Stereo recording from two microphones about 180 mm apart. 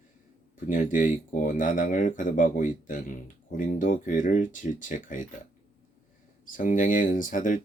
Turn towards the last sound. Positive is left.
turn(degrees=45)  # may be behind; listen again after turning